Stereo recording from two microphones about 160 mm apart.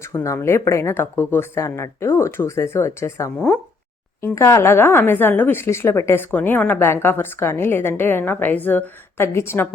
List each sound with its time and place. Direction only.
0.0 s speech: 20° left (ahead or behind)